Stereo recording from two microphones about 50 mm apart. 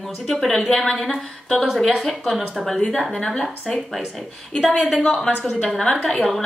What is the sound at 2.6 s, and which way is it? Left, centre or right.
Speech, centre.